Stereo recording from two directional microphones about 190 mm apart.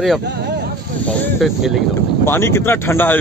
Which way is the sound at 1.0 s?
5° left (ahead or behind).